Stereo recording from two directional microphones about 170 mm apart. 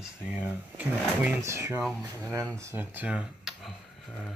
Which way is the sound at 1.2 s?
15° right (ahead or behind).